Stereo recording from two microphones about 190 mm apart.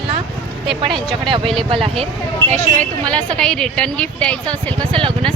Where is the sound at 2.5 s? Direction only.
5° left (ahead or behind).